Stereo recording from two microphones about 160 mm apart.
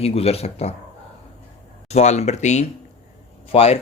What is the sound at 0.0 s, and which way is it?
Speech, 40° left (ahead or behind).